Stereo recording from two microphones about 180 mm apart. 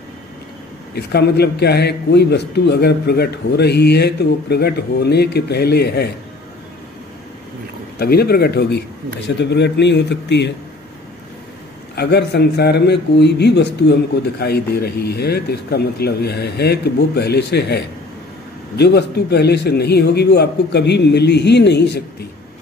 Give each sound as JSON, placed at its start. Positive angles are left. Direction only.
{"t": 0.9, "sound": "a man's voice", "side_deg": 65}
{"t": 8.0, "sound": "a man's voice", "side_deg": 60}
{"t": 11.9, "sound": "a man's voice", "side_deg": 65}